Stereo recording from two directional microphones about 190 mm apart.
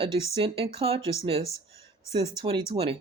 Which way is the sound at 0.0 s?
30° right (ahead or behind).